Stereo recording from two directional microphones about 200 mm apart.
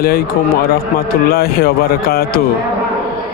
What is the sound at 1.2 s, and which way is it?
Speech, 50° left (ahead or behind).